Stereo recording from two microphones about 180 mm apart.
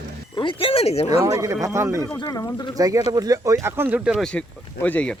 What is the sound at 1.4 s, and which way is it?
Speech, 15° right (ahead or behind).